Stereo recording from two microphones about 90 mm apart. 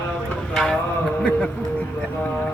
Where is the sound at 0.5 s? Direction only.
5° left (ahead or behind).